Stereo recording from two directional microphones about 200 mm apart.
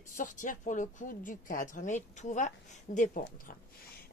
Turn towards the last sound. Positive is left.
turn(degrees=40)  # may be behind; listen again after turning